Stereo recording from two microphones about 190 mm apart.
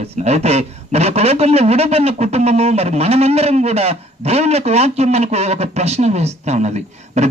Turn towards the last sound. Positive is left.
turn(degrees=-35)  # may be behind; listen again after turning